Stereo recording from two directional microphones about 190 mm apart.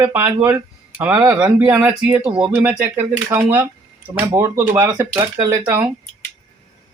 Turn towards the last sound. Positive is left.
turn(degrees=-15)  # may be behind; listen again after turning